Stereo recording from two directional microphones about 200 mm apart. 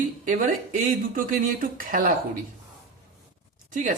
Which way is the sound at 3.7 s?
40° right (ahead or behind).